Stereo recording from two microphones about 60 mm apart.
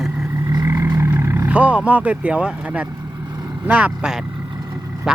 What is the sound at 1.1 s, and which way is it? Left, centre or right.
Vehicle, right.